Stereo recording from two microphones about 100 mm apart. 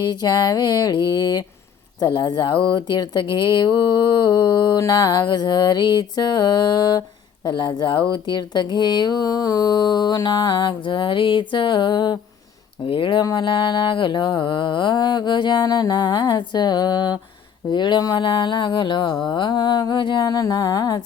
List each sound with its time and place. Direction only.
0.0 s speech: 45° left (ahead or behind)
12.8 s speech: 60° left (ahead or behind); by 21.0 s 40° left (ahead or behind)